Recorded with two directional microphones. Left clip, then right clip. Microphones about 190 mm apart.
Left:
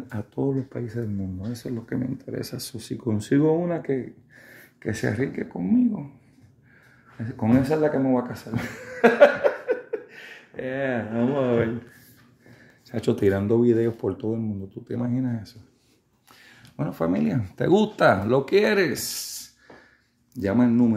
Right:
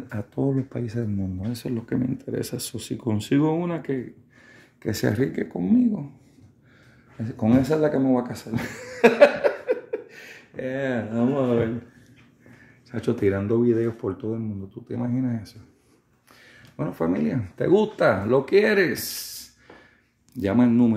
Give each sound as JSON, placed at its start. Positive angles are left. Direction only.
{"t": 0.1, "sound": "speech", "side_deg": -10}
{"t": 3.2, "sound": "speech", "side_deg": -30}
{"t": 7.3, "sound": "speech", "side_deg": -15}
{"t": 12.9, "sound": "speech", "side_deg": 5}